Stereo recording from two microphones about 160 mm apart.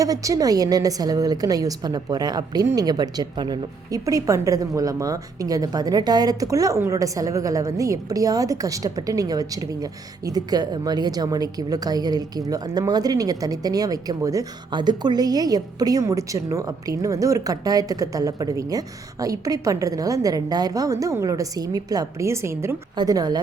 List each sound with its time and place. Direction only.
0.0 s speech: 20° right (ahead or behind)